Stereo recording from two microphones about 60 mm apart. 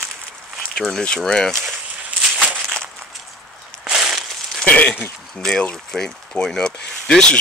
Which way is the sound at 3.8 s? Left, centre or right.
Centre.